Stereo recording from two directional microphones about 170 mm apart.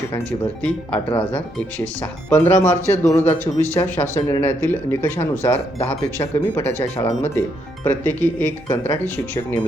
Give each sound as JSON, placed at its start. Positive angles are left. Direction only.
{"t": 0.1, "sound": "speech", "side_deg": 10}
{"t": 3.4, "sound": "speech", "side_deg": -15}
{"t": 3.8, "sound": "speech", "side_deg": 10}